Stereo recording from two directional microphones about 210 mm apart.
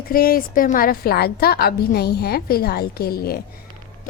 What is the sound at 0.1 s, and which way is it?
A woman's voice, 45° left (ahead or behind).